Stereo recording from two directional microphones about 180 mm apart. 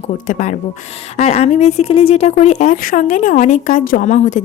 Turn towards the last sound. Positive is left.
turn(degrees=40)  # may be behind; listen again after turning